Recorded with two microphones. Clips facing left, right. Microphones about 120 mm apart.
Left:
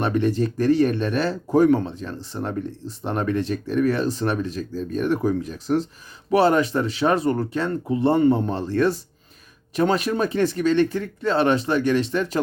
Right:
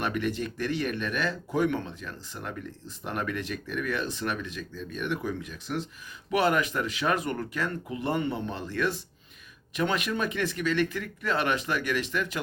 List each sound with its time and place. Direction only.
0.0 s speech: 30° left (ahead or behind)